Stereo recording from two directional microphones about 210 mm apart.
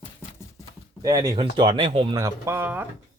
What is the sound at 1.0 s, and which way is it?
Speech, 20° right (ahead or behind).